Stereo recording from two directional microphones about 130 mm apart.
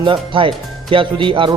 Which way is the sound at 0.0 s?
40° right (ahead or behind).